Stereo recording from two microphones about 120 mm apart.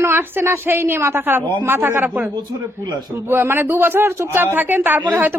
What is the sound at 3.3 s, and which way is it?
A woman's voice, 20° right (ahead or behind).